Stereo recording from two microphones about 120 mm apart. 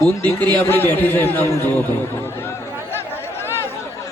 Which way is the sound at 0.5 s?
15° left (ahead or behind).